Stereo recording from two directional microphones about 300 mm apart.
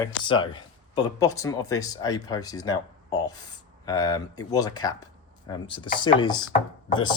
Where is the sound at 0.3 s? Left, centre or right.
Centre.